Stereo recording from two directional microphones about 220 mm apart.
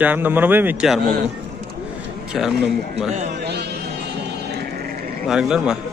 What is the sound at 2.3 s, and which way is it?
Speech, centre (ahead or behind).